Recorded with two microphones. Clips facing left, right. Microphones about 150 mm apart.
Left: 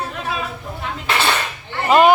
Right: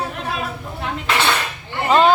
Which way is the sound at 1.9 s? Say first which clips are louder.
Left 2 dB; 10° left (ahead or behind).